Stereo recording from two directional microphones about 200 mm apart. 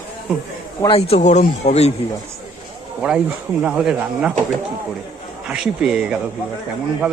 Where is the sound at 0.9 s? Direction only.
30° left (ahead or behind).